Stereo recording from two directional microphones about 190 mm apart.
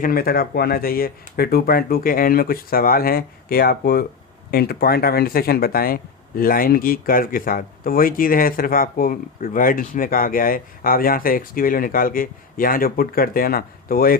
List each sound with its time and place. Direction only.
0.0 s speech: 50° left (ahead or behind)